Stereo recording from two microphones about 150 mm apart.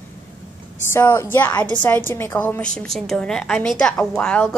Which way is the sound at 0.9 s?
15° left (ahead or behind).